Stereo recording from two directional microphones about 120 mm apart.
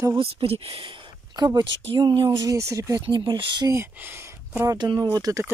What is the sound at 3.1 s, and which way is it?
Speech, 40° right (ahead or behind).